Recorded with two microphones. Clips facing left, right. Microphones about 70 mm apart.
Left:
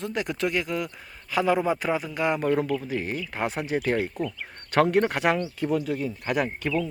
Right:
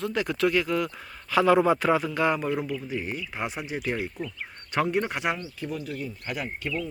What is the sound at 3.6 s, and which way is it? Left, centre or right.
Speech, left.